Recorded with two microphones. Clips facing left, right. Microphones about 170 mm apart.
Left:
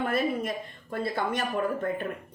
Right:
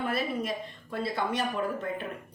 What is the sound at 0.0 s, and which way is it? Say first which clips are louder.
A woman's voice: left 3 dB; 50° left (ahead or behind).